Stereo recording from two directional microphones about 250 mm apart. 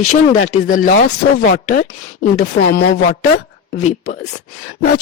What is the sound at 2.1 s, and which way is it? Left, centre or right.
A man's voice, left.